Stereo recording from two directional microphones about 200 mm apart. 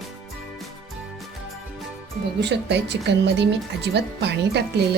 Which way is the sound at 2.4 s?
60° right (ahead or behind).